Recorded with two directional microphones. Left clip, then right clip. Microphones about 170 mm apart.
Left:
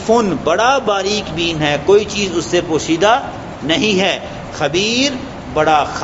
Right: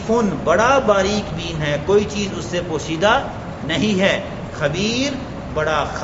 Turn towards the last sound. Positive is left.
turn(degrees=25)  # may be behind; listen again after turning